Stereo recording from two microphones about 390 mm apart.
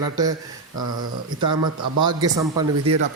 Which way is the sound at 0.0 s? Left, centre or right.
Centre.